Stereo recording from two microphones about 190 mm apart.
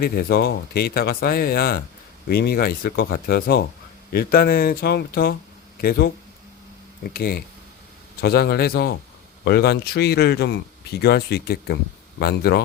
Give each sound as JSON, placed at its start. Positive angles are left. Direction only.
{"t": 0.0, "sound": "speech", "side_deg": 55}